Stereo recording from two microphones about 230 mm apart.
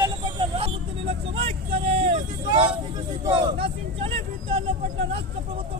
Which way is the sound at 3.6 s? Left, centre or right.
Right.